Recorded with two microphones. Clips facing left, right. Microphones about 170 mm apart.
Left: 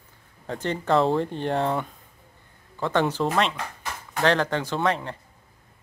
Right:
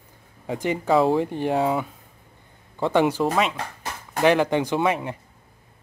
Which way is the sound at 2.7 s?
15° right (ahead or behind).